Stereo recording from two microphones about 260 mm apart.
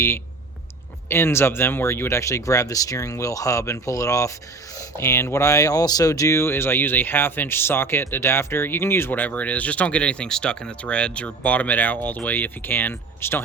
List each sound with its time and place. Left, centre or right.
1.0 s speech: centre